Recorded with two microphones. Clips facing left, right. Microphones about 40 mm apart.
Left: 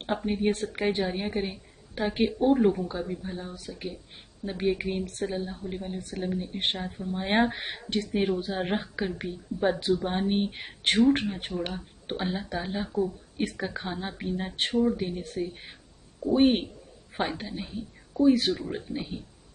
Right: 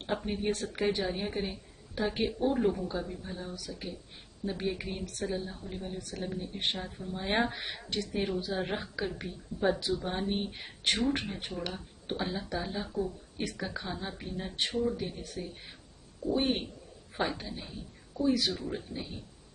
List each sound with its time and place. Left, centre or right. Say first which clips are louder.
0.1 s a woman's voice: left 5 dB; centre
0.5 s a woman's voice: left 2 dB; left
2.7 s a woman's voice: left 4 dB; centre
9.8 s speech: left 6 dB; left
11.6 s a woman's voice: left 4 dB; left
14.5 s speech: left 5 dB; left
14.9 s a woman's voice: left 5 dB; left
15.2 s a woman's voice: left 8 dB; left